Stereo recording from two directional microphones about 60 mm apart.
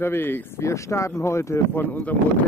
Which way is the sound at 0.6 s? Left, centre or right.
Left.